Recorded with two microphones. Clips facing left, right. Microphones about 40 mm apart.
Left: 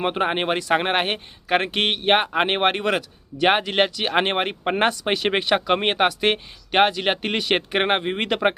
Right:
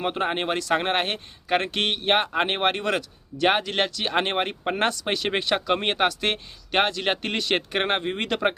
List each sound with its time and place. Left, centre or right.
0.0 s speech: left